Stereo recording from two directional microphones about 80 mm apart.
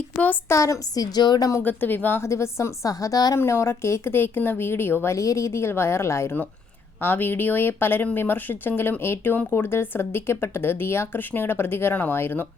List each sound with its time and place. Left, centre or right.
0.4 s speech: left
1.1 s a woman's voice: left
1.6 s speech: left
2.2 s speech: left
3.3 s speech: left